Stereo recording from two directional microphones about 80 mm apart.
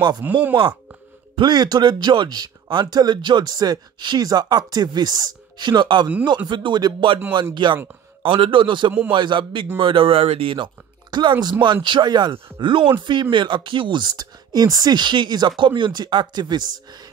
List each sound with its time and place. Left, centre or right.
0.2 s speech: centre
1.3 s speech: right
7.6 s speech: right
11.6 s speech: right
13.0 s speech: right